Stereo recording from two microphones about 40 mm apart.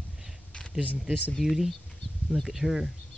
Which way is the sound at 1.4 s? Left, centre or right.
Centre.